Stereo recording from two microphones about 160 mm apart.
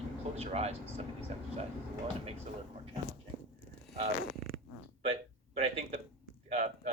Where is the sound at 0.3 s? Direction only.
40° right (ahead or behind).